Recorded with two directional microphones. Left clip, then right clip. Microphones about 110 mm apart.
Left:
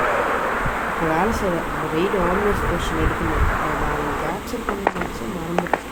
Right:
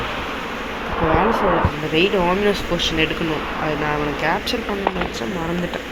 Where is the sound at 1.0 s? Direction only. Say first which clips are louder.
Right 4 dB; 20° left (ahead or behind).